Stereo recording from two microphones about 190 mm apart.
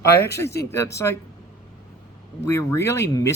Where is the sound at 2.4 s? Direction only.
15° left (ahead or behind).